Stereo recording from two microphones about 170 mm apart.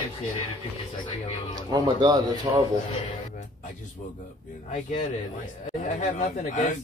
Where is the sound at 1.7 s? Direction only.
25° right (ahead or behind).